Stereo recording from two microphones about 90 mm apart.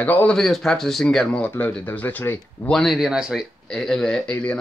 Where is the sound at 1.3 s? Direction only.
20° left (ahead or behind).